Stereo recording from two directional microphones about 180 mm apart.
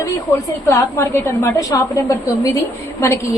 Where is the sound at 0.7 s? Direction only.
15° left (ahead or behind).